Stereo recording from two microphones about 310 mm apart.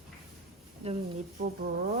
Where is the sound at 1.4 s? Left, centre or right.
Right.